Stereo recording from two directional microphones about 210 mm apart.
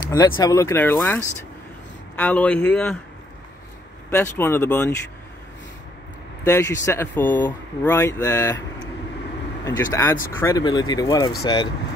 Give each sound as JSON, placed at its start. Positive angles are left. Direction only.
{"t": 0.1, "sound": "speech", "side_deg": 15}
{"t": 4.1, "sound": "speech", "side_deg": 10}
{"t": 6.4, "sound": "speech", "side_deg": 15}
{"t": 9.7, "sound": "speech", "side_deg": 15}